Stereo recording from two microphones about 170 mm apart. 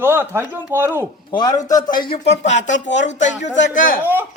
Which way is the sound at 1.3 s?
25° left (ahead or behind).